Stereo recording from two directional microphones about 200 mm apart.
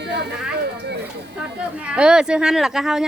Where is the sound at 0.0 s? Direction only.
55° right (ahead or behind).